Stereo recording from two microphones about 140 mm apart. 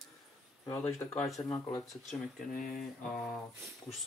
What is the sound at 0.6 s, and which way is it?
Speech, 15° left (ahead or behind).